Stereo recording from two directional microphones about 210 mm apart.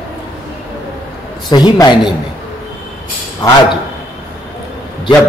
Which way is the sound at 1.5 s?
20° left (ahead or behind).